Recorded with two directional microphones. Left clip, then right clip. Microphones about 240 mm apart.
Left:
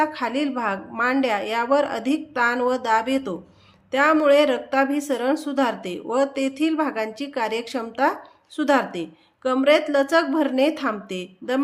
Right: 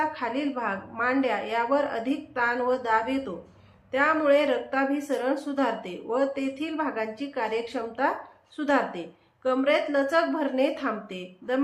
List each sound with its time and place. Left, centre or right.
0.0 s a woman's voice: left